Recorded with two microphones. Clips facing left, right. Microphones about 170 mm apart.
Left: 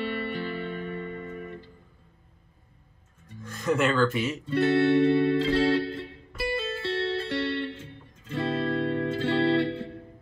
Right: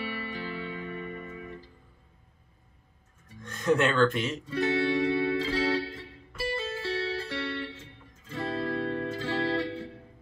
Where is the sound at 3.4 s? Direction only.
Centre (ahead or behind).